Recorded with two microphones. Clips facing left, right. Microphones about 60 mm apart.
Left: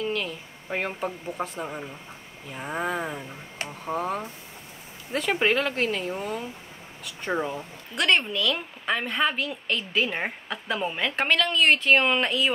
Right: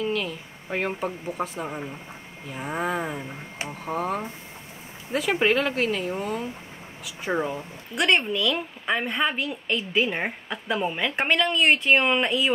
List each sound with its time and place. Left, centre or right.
0.0 s speech: centre
3.2 s speech: centre
3.8 s speech: centre
11.2 s speech: centre